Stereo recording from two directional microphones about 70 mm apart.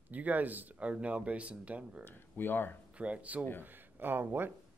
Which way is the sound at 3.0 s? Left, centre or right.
Centre.